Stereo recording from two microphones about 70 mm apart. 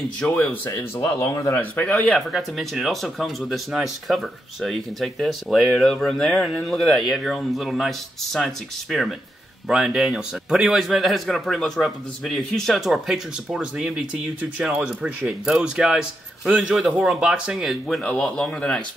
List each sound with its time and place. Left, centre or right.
0.4 s speech: left
1.0 s speech: left
1.5 s a man's voice: left
2.0 s speech: centre
9.7 s speech: centre
18.0 s speech: centre